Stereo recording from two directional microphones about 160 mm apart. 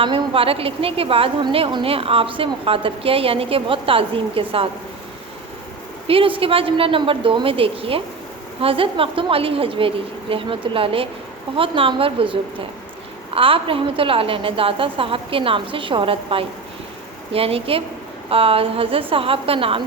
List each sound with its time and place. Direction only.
0.0 s a woman's voice: 35° right (ahead or behind)
6.1 s a woman's voice: 35° right (ahead or behind)